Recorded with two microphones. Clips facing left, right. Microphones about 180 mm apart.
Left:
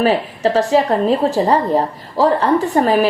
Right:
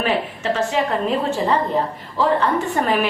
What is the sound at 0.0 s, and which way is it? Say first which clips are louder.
A woman's voice: left 6 dB; 35° left (ahead or behind).